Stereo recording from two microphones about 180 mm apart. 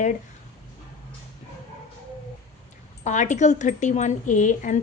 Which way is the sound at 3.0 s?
40° left (ahead or behind).